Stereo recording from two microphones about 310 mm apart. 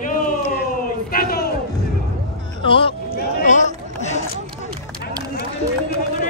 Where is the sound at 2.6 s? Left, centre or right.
Centre.